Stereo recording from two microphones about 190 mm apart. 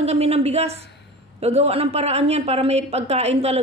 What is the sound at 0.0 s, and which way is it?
A woman's voice, 35° right (ahead or behind).